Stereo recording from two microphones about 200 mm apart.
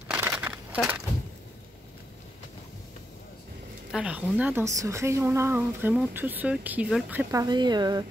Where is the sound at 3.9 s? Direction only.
5° right (ahead or behind).